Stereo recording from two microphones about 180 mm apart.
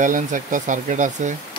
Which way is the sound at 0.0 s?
45° right (ahead or behind).